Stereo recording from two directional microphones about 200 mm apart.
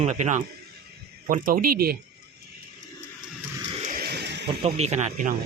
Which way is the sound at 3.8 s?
45° right (ahead or behind).